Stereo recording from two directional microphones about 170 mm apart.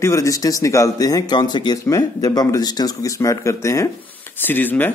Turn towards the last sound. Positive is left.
turn(degrees=10)  # may be behind; listen again after turning